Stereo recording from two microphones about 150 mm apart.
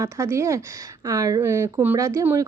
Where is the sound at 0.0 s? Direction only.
20° right (ahead or behind).